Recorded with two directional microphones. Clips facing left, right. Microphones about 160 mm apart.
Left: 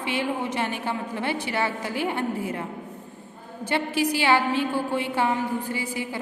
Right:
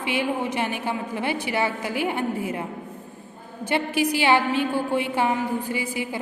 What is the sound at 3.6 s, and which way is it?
A woman's voice, 15° right (ahead or behind).